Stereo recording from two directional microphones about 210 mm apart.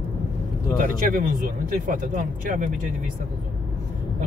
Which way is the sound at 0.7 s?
40° right (ahead or behind).